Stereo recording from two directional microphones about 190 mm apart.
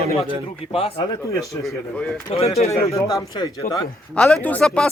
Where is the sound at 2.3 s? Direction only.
35° left (ahead or behind).